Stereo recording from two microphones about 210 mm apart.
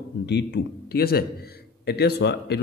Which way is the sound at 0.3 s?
55° left (ahead or behind).